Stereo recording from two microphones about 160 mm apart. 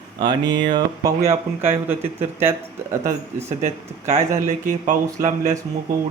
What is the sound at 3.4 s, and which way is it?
Speech, 45° right (ahead or behind).